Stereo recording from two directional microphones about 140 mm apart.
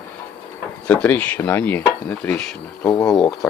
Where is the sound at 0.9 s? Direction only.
10° left (ahead or behind).